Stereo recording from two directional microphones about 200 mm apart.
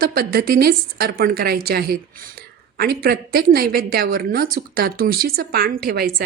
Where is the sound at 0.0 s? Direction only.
50° right (ahead or behind).